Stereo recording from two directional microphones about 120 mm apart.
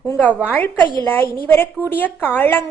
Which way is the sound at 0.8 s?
40° right (ahead or behind).